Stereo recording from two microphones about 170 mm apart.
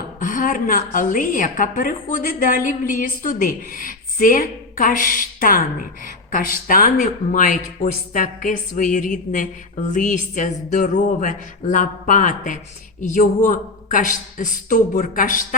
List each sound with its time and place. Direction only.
0.2 s speech: 50° left (ahead or behind)